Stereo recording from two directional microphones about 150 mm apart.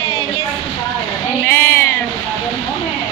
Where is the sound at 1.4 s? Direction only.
15° left (ahead or behind).